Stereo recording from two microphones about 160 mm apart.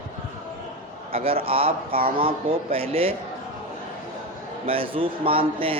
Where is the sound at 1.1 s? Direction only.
35° right (ahead or behind).